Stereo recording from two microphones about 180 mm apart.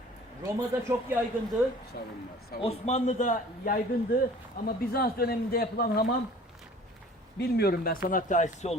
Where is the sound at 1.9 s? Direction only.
60° left (ahead or behind).